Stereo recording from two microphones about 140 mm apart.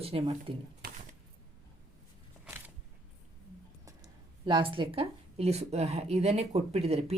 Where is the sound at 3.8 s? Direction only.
20° right (ahead or behind).